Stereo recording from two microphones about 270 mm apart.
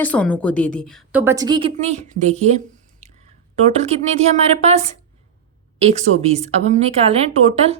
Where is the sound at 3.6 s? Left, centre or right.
Right.